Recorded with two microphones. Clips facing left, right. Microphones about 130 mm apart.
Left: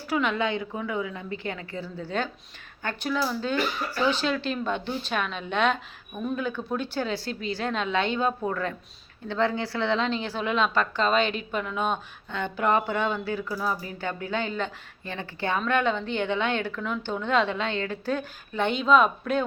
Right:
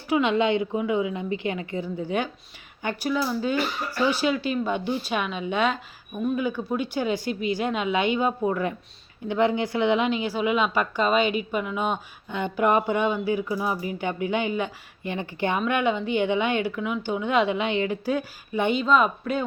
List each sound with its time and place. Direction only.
0.1 s a woman's voice: 20° right (ahead or behind); by 19.5 s 5° right (ahead or behind)